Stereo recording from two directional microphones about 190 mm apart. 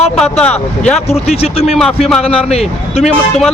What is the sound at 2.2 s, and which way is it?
Speech, 30° left (ahead or behind).